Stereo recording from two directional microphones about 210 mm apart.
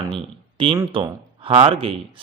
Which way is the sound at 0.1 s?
25° right (ahead or behind).